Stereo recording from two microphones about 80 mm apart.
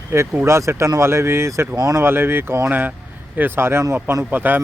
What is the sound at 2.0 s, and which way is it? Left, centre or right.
Speech, right.